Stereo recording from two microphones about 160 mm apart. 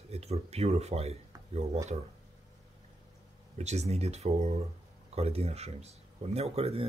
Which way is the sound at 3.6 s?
45° right (ahead or behind).